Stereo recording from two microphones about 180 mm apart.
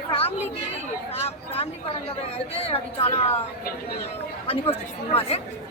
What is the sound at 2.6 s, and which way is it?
Speech, 35° left (ahead or behind).